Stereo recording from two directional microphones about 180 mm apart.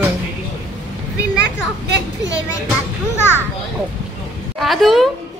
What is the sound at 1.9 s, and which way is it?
Speech, 80° right.